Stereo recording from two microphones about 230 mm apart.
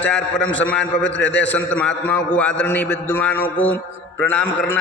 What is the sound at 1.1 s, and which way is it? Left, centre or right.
Speech, left.